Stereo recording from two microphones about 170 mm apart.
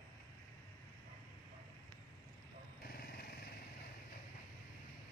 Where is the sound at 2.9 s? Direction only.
65° left (ahead or behind).